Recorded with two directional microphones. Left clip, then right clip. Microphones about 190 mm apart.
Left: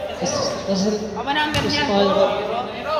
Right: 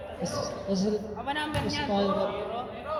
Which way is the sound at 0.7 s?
45° right (ahead or behind).